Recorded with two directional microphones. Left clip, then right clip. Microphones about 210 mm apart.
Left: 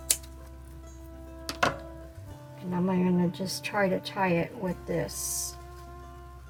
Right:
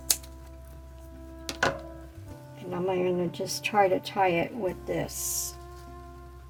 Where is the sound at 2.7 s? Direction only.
35° right (ahead or behind).